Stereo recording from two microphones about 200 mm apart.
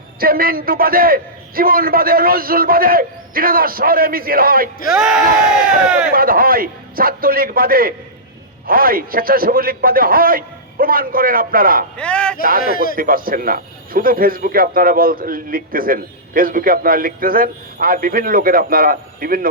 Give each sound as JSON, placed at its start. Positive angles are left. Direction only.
{"t": 0.2, "sound": "a man's voice", "side_deg": -45}
{"t": 4.9, "sound": "speech", "side_deg": -5}
{"t": 6.1, "sound": "a man's voice", "side_deg": -45}
{"t": 11.9, "sound": "speech", "side_deg": 5}
{"t": 12.7, "sound": "speech", "side_deg": 45}
{"t": 13.0, "sound": "a man's voice", "side_deg": -45}